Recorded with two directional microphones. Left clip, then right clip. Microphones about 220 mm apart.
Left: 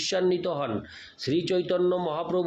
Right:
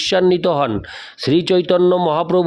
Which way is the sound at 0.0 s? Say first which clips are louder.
Right 11 dB; 50° right (ahead or behind).